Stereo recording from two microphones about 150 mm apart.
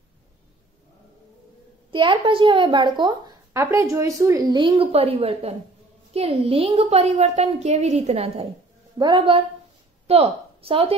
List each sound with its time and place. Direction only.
1.9 s a woman's voice: 35° right (ahead or behind)
8.9 s a woman's voice: 30° right (ahead or behind)